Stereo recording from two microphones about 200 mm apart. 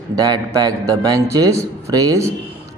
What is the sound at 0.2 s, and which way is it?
Speech, 20° right (ahead or behind).